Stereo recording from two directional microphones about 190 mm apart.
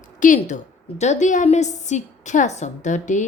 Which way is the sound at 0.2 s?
40° left (ahead or behind).